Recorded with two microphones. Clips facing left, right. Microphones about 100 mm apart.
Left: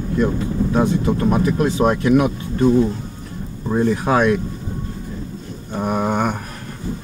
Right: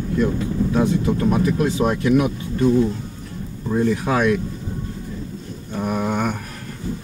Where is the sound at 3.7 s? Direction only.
40° left (ahead or behind).